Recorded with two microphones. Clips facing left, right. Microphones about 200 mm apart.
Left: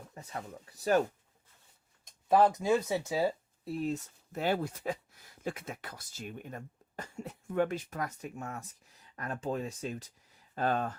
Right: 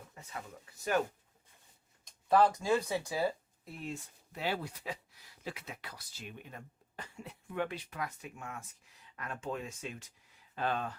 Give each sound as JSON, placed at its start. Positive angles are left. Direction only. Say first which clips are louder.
{"t": 0.1, "sound": "speech", "louder": "left 5 dB", "side_deg": 40}
{"t": 2.3, "sound": "speech", "louder": "left 2 dB", "side_deg": 20}